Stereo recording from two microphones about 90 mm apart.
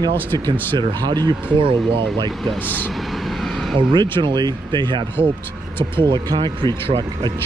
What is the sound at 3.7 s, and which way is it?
Speech, 60° right (ahead or behind).